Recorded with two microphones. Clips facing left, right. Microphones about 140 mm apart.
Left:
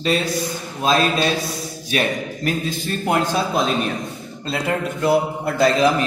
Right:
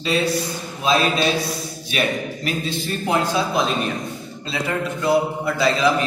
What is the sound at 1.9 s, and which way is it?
A man's voice, 45° left (ahead or behind).